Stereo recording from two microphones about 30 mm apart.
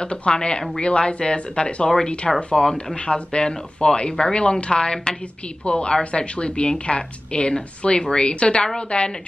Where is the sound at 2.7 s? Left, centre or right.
Left.